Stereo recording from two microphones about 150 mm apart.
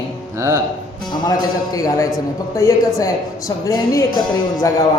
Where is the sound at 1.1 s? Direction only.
25° left (ahead or behind).